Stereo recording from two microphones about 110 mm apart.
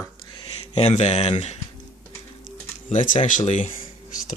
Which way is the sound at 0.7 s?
85° left.